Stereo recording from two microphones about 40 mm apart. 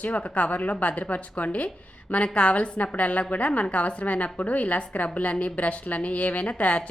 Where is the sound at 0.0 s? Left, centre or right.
Left.